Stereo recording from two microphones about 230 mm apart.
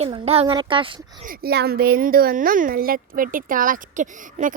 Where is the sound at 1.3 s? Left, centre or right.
Right.